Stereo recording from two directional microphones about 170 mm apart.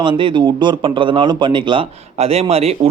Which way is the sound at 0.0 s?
30° right (ahead or behind).